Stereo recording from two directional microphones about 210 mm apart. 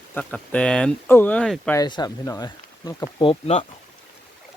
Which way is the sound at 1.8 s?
20° left (ahead or behind).